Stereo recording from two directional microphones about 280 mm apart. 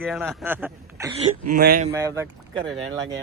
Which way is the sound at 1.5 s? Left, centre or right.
Right.